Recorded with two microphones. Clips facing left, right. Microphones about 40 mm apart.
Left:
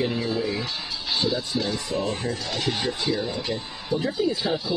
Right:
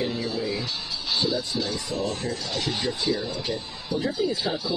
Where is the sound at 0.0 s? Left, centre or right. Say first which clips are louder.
Left 2 dB; centre.